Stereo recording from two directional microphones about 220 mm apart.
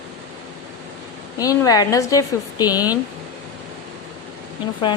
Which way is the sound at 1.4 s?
15° left (ahead or behind).